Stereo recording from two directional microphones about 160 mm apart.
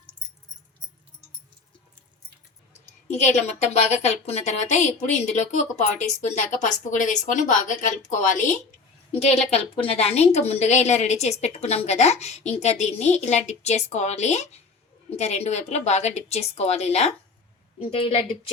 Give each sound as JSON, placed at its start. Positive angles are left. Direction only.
{"t": 2.7, "sound": "a woman's voice", "side_deg": 45}
{"t": 6.9, "sound": "a woman's voice", "side_deg": 50}
{"t": 9.1, "sound": "a woman's voice", "side_deg": 40}